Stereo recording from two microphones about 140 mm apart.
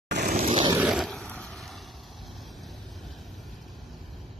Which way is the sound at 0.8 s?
Centre (ahead or behind).